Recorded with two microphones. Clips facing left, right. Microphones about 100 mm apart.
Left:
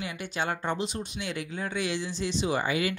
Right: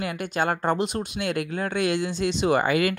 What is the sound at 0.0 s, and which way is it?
Speech, 55° right (ahead or behind).